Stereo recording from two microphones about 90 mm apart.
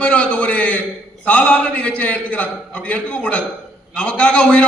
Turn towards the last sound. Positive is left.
turn(degrees=10)  # may be behind; listen again after turning